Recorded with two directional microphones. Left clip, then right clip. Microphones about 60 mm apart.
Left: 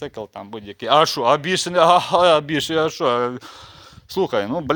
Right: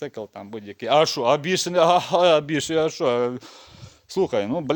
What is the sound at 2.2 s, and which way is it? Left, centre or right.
Speech, right.